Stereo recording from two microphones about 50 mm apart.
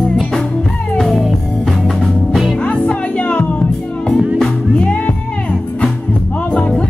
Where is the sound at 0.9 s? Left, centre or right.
Centre.